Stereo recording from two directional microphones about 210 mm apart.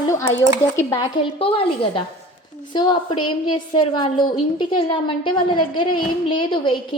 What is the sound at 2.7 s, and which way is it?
A woman's voice, 20° left (ahead or behind).